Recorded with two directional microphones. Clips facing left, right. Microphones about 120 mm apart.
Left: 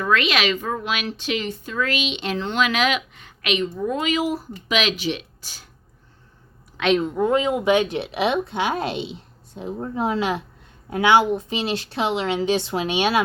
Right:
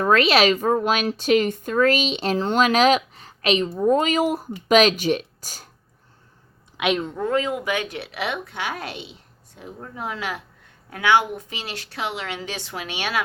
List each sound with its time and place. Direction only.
0.0 s speech: 40° right (ahead or behind)
6.7 s a woman's voice: 10° right (ahead or behind)
7.0 s speech: 10° left (ahead or behind)
7.3 s a woman's voice: 20° left (ahead or behind)